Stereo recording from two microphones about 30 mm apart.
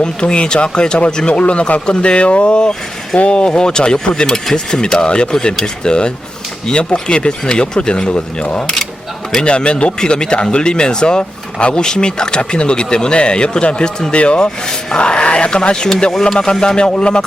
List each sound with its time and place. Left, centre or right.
0.0 s speech: left